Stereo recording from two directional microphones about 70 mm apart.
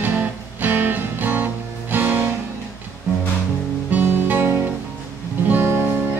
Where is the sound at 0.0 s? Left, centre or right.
Right.